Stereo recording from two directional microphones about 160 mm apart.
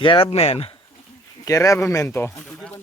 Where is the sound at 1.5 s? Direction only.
20° left (ahead or behind).